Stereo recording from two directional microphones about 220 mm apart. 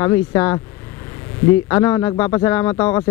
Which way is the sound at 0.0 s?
15° left (ahead or behind).